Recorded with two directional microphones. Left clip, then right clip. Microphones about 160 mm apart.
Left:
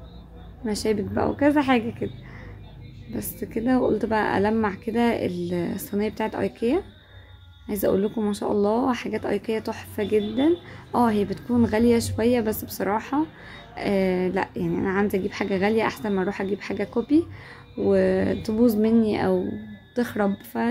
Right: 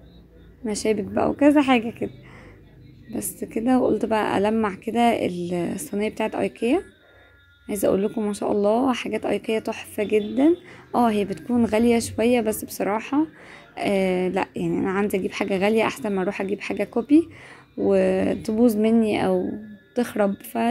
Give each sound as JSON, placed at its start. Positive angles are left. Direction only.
{"t": 0.7, "sound": "speech", "side_deg": -15}
{"t": 3.1, "sound": "speech", "side_deg": -20}